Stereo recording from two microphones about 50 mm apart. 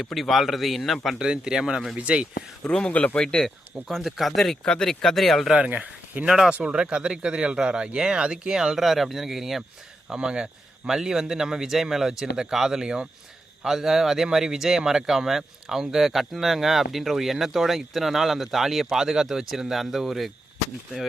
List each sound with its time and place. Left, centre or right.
0.0 s speech: centre
1.2 s speech: centre
2.6 s speech: left
3.8 s speech: centre
4.6 s speech: centre
5.5 s speech: right
6.2 s speech: centre
6.5 s speech: right; by 9.6 s centre
10.1 s speech: centre